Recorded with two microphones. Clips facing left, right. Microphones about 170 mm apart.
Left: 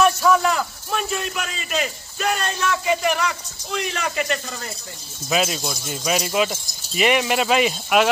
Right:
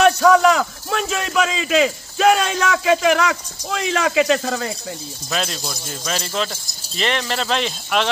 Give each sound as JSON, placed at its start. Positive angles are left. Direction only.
{"t": 0.0, "sound": "a man's voice", "side_deg": -90}
{"t": 5.3, "sound": "speech", "side_deg": 5}